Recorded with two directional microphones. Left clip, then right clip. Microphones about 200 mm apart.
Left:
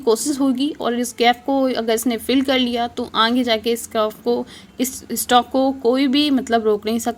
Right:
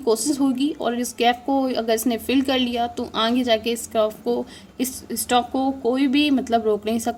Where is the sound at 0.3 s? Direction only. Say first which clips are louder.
Left 2 dB; 20° left (ahead or behind).